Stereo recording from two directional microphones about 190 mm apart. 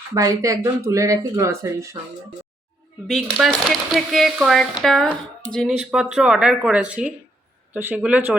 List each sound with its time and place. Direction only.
0.1 s speech: 15° right (ahead or behind)
3.1 s speech: centre (ahead or behind)